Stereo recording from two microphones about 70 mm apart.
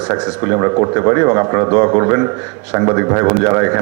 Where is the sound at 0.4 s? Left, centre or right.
Right.